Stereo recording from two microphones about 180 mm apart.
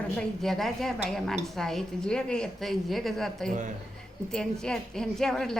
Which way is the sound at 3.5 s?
45° right (ahead or behind).